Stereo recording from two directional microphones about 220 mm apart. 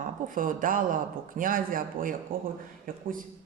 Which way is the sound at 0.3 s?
40° right (ahead or behind).